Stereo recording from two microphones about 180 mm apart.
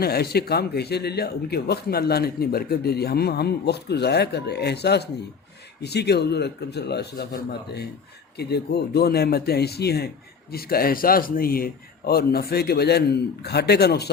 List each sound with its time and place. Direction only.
0.0 s speech: 60° left (ahead or behind)